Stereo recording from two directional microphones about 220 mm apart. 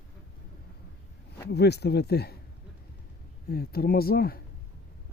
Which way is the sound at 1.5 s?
50° left (ahead or behind).